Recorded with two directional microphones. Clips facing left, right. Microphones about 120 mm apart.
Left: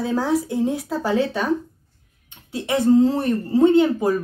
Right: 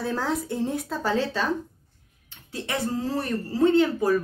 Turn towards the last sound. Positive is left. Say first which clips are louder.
# left 4 dB
turn(degrees=20)  # may be behind; listen again after turning